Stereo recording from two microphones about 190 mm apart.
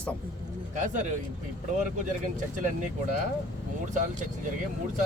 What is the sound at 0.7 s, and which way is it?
Speech, 40° right (ahead or behind).